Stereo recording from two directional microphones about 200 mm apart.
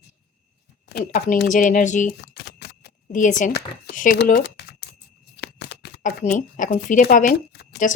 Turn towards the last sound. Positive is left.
turn(degrees=40)  # may be behind; listen again after turning